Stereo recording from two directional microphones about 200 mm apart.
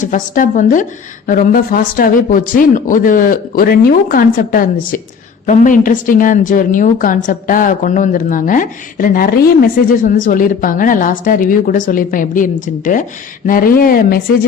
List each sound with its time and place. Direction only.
0.0 s a woman's voice: 40° left (ahead or behind)